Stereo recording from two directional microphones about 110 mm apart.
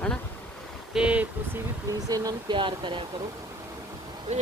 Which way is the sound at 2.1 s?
35° right (ahead or behind).